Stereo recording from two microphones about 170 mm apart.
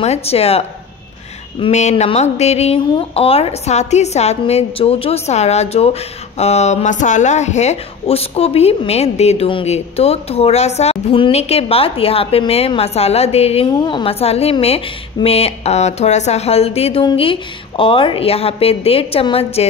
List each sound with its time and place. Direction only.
0.0 s speech: 35° left (ahead or behind)
13.7 s speech: 25° left (ahead or behind)